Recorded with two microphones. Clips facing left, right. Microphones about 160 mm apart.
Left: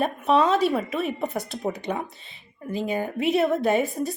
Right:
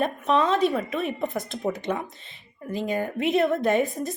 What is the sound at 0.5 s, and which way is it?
Speech, 5° left (ahead or behind).